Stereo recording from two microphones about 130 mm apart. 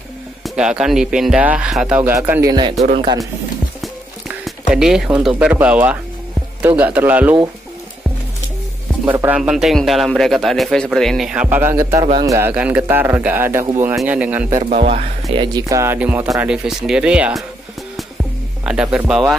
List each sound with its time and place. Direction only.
0.6 s speech: 5° right (ahead or behind)
2.4 s speech: 35° right (ahead or behind)
4.5 s speech: 5° right (ahead or behind)
9.0 s speech: 15° right (ahead or behind)
9.4 s a man's voice: centre (ahead or behind)
11.4 s speech: 20° right (ahead or behind)
12.4 s speech: 15° right (ahead or behind)
14.8 s speech: 50° right (ahead or behind)
15.3 s speech: 35° right (ahead or behind)
16.0 s speech: 10° right (ahead or behind)
18.7 s speech: 5° right (ahead or behind)